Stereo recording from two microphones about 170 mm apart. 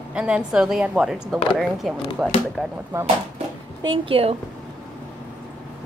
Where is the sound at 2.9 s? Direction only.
15° right (ahead or behind).